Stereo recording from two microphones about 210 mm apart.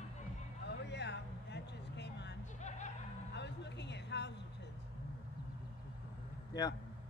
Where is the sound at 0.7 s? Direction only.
55° left (ahead or behind).